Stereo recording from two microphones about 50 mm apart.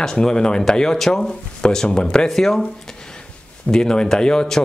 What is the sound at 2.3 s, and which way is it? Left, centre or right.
Speech, centre.